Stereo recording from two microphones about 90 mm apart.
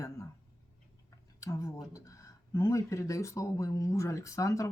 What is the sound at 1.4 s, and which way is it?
Speech, 35° left (ahead or behind).